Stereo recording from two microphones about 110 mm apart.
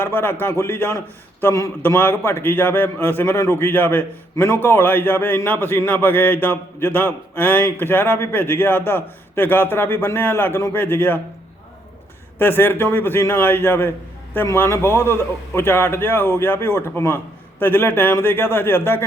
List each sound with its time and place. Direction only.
0.0 s a man's voice: 20° left (ahead or behind)
12.4 s a man's voice: 20° left (ahead or behind)